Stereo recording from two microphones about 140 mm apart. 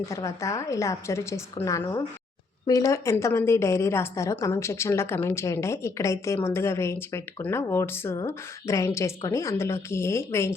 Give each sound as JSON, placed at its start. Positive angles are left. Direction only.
{"t": 0.1, "sound": "a woman's voice", "side_deg": 20}